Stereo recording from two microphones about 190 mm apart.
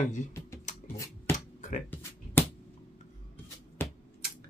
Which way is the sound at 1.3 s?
40° left (ahead or behind).